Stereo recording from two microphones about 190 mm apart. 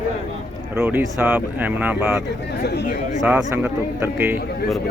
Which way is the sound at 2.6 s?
60° left (ahead or behind).